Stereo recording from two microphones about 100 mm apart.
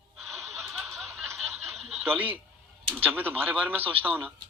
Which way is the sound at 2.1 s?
15° right (ahead or behind).